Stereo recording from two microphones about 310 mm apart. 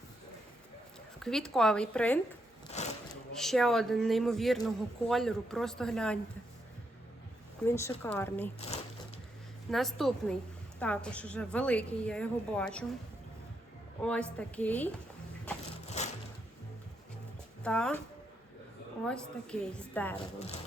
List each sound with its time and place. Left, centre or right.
1.2 s speech: centre
2.7 s a sound: left
3.3 s speech: centre
7.6 s speech: centre
8.5 s speech: left
9.6 s speech: centre
14.0 s speech: centre
16.0 s a sound: left
17.6 s speech: centre
19.0 s speech: centre